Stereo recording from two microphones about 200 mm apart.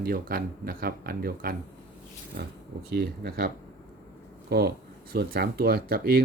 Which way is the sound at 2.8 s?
55° right (ahead or behind).